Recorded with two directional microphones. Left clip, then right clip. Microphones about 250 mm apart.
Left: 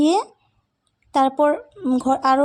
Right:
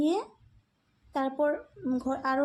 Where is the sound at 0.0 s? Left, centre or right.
Left.